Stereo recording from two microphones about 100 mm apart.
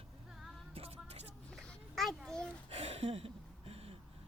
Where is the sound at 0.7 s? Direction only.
75° right (ahead or behind).